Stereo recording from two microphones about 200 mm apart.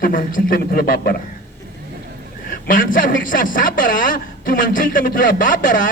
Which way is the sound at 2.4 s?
45° left (ahead or behind).